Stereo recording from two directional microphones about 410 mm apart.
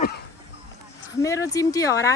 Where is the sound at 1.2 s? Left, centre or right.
Centre.